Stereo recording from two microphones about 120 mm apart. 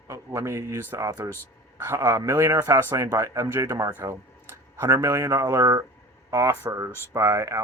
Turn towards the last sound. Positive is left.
turn(degrees=-25)  # may be behind; listen again after turning